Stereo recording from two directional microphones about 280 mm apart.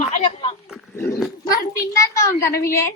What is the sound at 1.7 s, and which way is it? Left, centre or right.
Speech, centre.